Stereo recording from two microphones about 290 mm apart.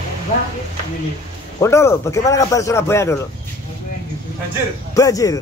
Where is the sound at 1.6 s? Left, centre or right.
Centre.